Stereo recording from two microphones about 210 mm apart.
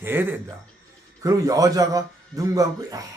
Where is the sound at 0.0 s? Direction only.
10° right (ahead or behind).